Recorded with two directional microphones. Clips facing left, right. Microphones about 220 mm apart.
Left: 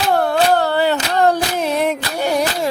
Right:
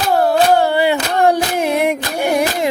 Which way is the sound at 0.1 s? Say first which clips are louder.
Right 3 dB; 5° right (ahead or behind).